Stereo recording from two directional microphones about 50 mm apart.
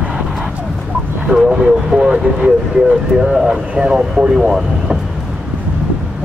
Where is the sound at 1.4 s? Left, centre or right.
Centre.